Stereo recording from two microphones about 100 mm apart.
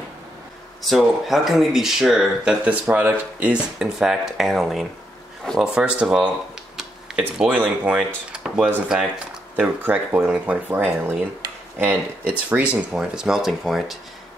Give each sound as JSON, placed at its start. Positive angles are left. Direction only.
{"t": 0.8, "sound": "speech", "side_deg": 0}
{"t": 3.8, "sound": "speech", "side_deg": -5}
{"t": 9.8, "sound": "speech", "side_deg": -20}